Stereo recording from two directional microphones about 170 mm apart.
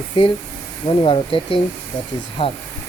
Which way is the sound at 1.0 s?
30° left (ahead or behind).